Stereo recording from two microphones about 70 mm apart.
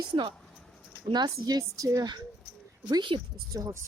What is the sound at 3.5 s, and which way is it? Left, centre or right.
Speech, right.